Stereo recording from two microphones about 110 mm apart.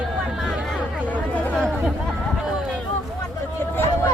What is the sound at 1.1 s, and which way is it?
Chatter, 15° left (ahead or behind).